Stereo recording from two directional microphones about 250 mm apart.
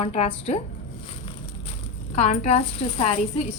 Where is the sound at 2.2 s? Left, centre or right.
Left.